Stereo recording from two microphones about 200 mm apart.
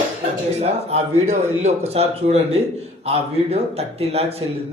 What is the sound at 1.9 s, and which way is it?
A man's voice, 30° right (ahead or behind).